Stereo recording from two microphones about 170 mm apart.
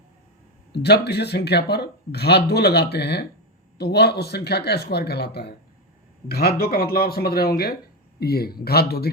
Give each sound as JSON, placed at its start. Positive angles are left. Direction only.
{"t": 0.7, "sound": "speech", "side_deg": 75}